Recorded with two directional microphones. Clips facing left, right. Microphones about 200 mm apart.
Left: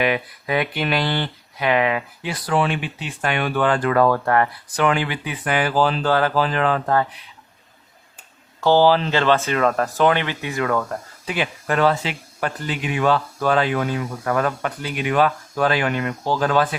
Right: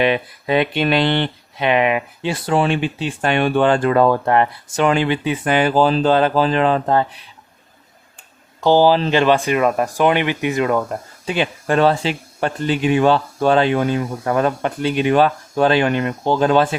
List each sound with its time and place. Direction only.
0.0 s speech: 25° right (ahead or behind)
8.6 s speech: 15° right (ahead or behind)